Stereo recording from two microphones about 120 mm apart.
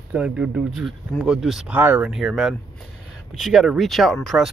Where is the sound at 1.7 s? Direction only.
15° right (ahead or behind).